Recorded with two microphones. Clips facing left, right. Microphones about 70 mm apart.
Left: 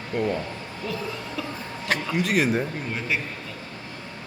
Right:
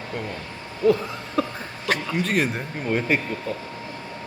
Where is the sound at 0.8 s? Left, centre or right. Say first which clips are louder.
Right 11 dB; right.